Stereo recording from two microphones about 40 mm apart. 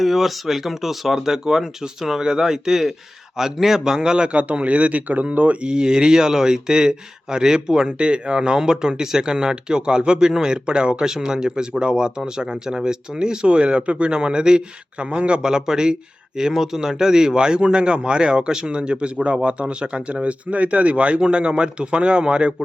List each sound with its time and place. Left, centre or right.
0.0 s speech: centre
4.4 s speech: right
5.5 s speech: right